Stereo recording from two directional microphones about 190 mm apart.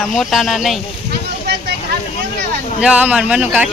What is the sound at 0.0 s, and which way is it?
Speech, centre (ahead or behind).